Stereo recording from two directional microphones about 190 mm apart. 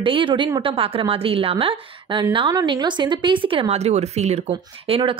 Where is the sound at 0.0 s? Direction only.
25° right (ahead or behind).